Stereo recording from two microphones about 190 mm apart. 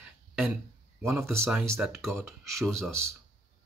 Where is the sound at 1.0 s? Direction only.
15° right (ahead or behind).